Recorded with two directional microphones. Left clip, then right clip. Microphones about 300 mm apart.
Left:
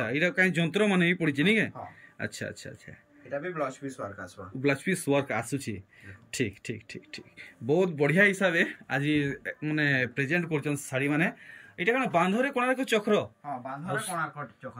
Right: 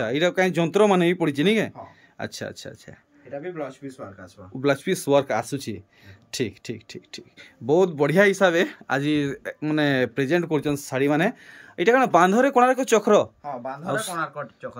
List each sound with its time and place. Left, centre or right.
0.0 s speech: centre
3.3 s speech: centre
4.6 s speech: centre